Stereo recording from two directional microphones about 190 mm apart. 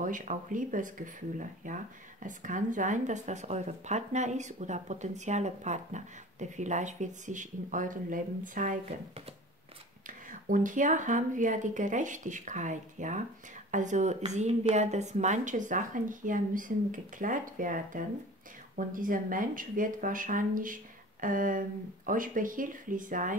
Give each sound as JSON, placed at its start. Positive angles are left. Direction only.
{"t": 0.0, "sound": "speech", "side_deg": -40}
{"t": 10.0, "sound": "speech", "side_deg": -45}